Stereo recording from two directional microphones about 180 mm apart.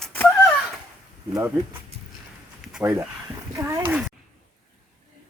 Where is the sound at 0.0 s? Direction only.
10° left (ahead or behind).